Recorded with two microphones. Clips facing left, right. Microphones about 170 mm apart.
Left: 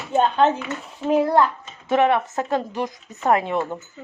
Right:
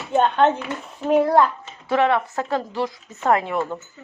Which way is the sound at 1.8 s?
20° left (ahead or behind).